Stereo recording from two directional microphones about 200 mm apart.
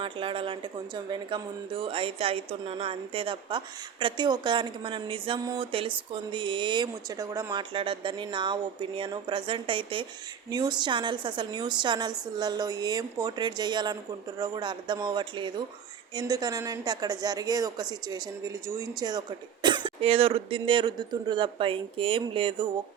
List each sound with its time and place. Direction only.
0.0 s a woman's voice: 25° right (ahead or behind)